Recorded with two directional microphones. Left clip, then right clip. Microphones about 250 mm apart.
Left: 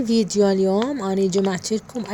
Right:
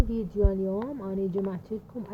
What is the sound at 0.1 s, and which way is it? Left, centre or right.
A woman's voice, left.